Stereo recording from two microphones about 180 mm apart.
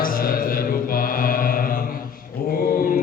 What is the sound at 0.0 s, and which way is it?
Mantra, 55° left (ahead or behind).